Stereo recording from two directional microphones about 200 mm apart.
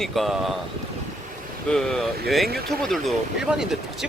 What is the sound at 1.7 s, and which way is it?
Speech, centre (ahead or behind).